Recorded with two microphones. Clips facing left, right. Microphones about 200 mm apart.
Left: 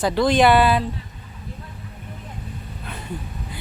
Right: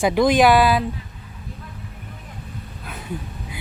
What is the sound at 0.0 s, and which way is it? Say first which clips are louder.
Speech: right 2 dB; 15° right (ahead or behind).